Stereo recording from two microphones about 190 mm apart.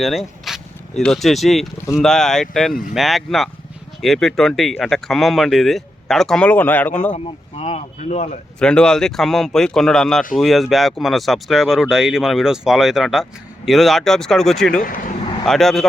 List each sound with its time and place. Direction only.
0.0 s speech: centre (ahead or behind)
7.1 s speech: 30° left (ahead or behind)
8.5 s speech: 5° left (ahead or behind)
14.8 s speech: 45° left (ahead or behind)
15.4 s speech: centre (ahead or behind)